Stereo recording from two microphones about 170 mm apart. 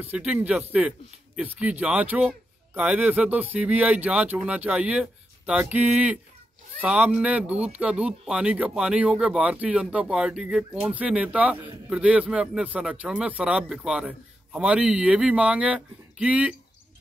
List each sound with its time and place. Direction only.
0.0 s speech: 5° right (ahead or behind)